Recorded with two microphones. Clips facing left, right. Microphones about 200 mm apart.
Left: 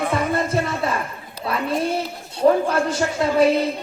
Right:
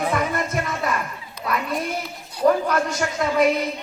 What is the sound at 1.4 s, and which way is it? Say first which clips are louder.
A woman's voice: left 3 dB; 30° left (ahead or behind).